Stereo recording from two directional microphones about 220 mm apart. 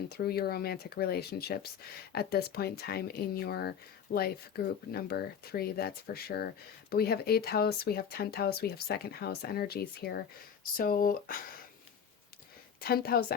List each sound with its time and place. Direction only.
0.1 s speech: 45° left (ahead or behind)
12.8 s speech: 45° left (ahead or behind)